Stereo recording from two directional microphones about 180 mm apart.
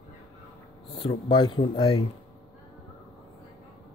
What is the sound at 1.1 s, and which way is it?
Speech, 25° left (ahead or behind).